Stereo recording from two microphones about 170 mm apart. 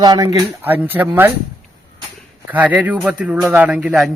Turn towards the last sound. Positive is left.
turn(degrees=-5)  # may be behind; listen again after turning